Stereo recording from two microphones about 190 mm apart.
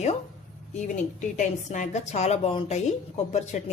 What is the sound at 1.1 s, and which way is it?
Speech, 40° left (ahead or behind).